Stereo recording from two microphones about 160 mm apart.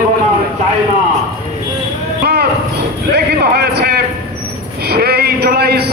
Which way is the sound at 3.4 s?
80° right.